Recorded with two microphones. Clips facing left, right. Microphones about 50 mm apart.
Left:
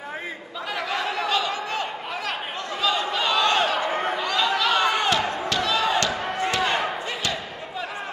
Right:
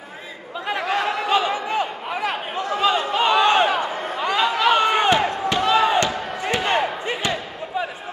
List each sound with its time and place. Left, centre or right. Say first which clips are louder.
0.7 s chatter: right 5 dB; right
4.2 s a sound: right 9 dB; right
4.6 s slam: right 6 dB; right